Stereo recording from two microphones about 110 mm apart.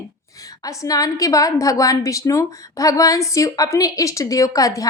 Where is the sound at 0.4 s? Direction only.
30° left (ahead or behind).